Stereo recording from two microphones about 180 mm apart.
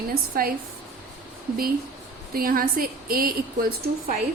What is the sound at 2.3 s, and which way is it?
A woman's voice, 55° right (ahead or behind).